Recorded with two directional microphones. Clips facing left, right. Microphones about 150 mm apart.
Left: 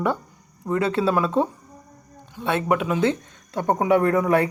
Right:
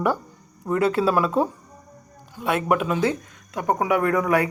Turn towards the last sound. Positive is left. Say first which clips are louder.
# left 2 dB
turn(degrees=25)  # may be behind; listen again after turning